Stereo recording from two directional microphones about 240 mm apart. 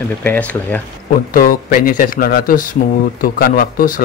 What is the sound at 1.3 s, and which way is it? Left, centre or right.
A man's voice, left.